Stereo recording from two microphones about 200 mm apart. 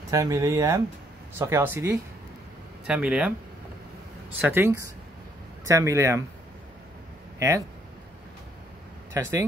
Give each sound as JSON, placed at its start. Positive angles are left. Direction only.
{"t": 0.1, "sound": "speech", "side_deg": -15}
{"t": 4.4, "sound": "speech", "side_deg": -10}
{"t": 7.3, "sound": "speech", "side_deg": -15}
{"t": 9.1, "sound": "speech", "side_deg": -15}